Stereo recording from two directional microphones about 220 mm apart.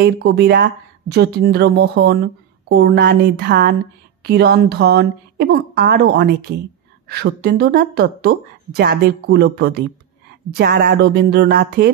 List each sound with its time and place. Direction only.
0.0 s a woman's voice: 45° right (ahead or behind)